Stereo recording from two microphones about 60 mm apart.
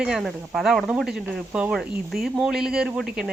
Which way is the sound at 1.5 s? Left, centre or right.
Right.